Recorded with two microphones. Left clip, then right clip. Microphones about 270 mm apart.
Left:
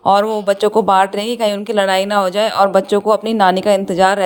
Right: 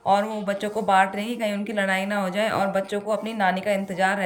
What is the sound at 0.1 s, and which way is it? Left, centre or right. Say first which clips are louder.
Speech: left 9 dB; centre.